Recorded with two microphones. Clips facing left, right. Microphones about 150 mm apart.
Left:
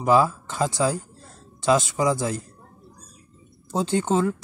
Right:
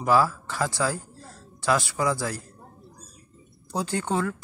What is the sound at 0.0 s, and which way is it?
A man's voice, 20° left (ahead or behind).